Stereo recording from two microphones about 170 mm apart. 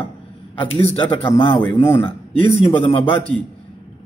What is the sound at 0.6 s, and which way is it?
Speech, 35° left (ahead or behind).